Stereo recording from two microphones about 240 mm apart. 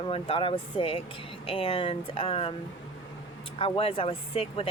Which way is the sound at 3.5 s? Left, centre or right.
Left.